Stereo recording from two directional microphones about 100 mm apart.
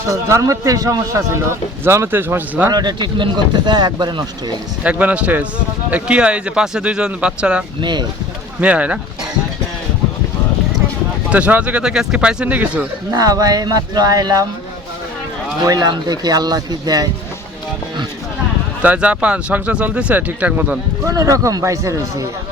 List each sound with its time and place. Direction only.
0.1 s speech: 30° right (ahead or behind)
2.6 s speech: 45° right (ahead or behind)
4.8 s speech: 15° right (ahead or behind)
7.8 s speech: 50° right (ahead or behind)
8.6 s speech: 15° right (ahead or behind)
11.3 s speech: 15° right (ahead or behind)
13.1 s speech: 40° right (ahead or behind)
15.6 s speech: 40° right (ahead or behind)
18.8 s speech: 15° right (ahead or behind)
21.0 s speech: 35° right (ahead or behind)